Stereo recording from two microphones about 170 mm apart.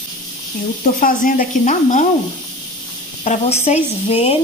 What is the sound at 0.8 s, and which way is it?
Speech, 50° left (ahead or behind).